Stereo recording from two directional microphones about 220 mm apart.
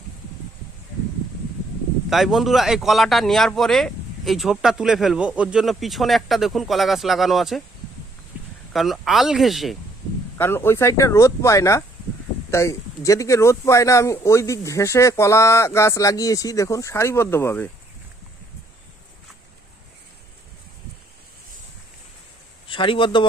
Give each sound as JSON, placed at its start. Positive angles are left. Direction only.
{"t": 2.0, "sound": "a man's voice", "side_deg": 0}
{"t": 8.7, "sound": "a man's voice", "side_deg": 0}
{"t": 10.3, "sound": "a man's voice", "side_deg": 10}
{"t": 22.7, "sound": "speech", "side_deg": 20}